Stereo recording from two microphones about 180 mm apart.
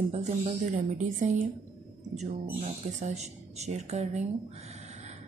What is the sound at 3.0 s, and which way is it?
Speech, 40° right (ahead or behind).